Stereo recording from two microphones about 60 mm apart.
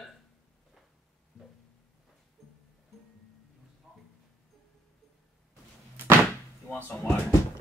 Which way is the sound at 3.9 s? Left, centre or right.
Centre.